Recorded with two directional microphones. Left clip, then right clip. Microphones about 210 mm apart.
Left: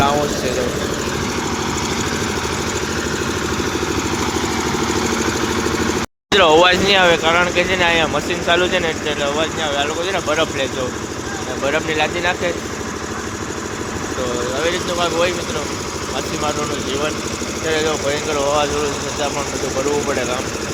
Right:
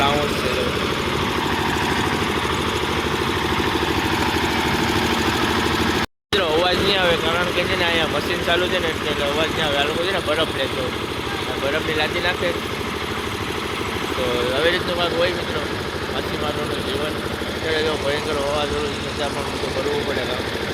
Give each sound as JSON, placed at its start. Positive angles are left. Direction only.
{"t": 6.3, "sound": "vehicle", "side_deg": 20}
{"t": 8.4, "sound": "speech", "side_deg": 10}
{"t": 11.7, "sound": "speech", "side_deg": 10}
{"t": 14.6, "sound": "speech", "side_deg": 5}
{"t": 17.7, "sound": "speech", "side_deg": 15}